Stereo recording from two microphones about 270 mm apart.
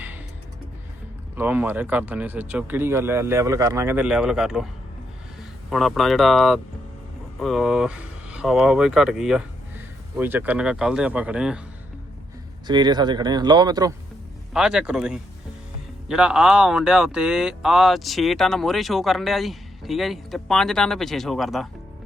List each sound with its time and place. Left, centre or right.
1.4 s speech: centre
12.6 s speech: centre
14.5 s speech: centre